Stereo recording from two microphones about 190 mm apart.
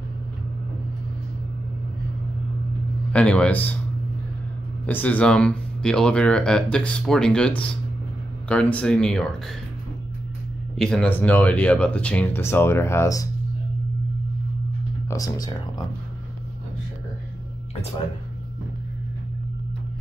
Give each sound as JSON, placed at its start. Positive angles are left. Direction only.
{"t": 3.1, "sound": "speech", "side_deg": 5}
{"t": 4.8, "sound": "speech", "side_deg": 10}
{"t": 10.8, "sound": "speech", "side_deg": 5}
{"t": 15.0, "sound": "speech", "side_deg": 20}